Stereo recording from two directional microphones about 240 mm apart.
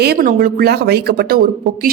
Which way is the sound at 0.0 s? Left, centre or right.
Right.